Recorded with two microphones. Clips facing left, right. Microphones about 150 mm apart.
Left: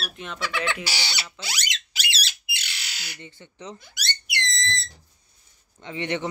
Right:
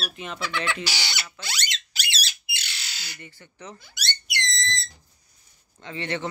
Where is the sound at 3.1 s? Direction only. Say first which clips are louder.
Left 2 dB; 20° left (ahead or behind).